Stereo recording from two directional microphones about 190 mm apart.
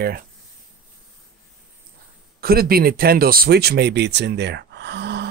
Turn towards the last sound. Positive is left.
turn(degrees=-60)  # may be behind; listen again after turning